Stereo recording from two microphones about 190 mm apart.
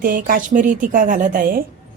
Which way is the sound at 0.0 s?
45° right (ahead or behind).